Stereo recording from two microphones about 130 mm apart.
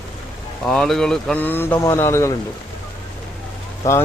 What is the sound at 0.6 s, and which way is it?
Speech, 5° left (ahead or behind).